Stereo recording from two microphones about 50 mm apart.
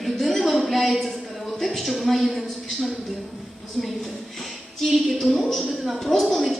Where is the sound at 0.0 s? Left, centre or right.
Centre.